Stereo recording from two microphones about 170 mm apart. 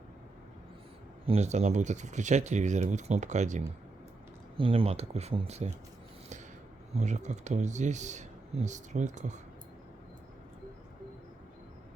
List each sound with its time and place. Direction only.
1.3 s speech: 40° right (ahead or behind)
4.5 s speech: 30° right (ahead or behind)
6.9 s speech: 45° right (ahead or behind)